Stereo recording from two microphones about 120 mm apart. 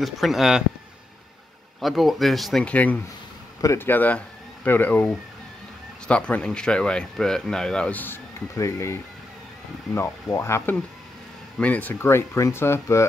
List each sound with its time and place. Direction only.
0.0 s speech: centre (ahead or behind)
1.8 s speech: centre (ahead or behind); by 13.0 s 20° left (ahead or behind)